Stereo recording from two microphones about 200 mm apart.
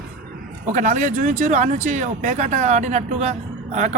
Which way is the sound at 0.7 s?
35° right (ahead or behind).